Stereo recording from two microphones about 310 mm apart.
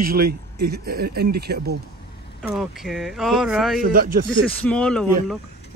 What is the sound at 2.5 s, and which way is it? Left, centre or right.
Speech, centre.